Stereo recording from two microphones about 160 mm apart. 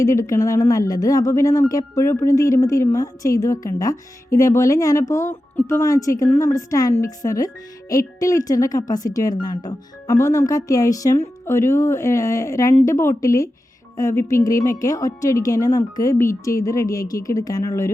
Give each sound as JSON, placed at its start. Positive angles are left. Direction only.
{"t": 0.0, "sound": "speech", "side_deg": 20}